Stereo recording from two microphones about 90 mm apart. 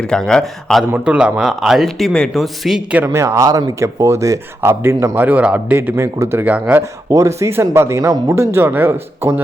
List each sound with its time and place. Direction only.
0.0 s speech: 5° left (ahead or behind)
1.0 s speech: 10° right (ahead or behind)
3.1 s speech: 30° right (ahead or behind)
5.2 s a man's voice: 15° right (ahead or behind)
7.1 s speech: 35° right (ahead or behind)